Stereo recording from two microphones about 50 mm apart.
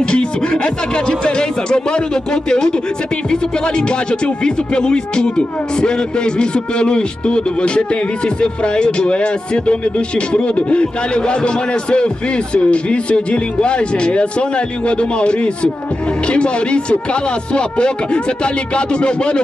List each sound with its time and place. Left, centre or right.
0.0 s a man's voice: centre